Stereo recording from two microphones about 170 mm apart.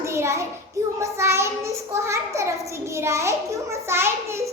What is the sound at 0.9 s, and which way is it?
A child's voice, 15° right (ahead or behind).